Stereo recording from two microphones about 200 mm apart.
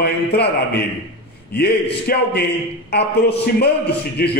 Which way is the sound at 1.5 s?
50° left (ahead or behind).